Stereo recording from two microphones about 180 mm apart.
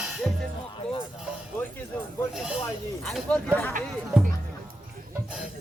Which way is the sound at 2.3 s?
5° right (ahead or behind).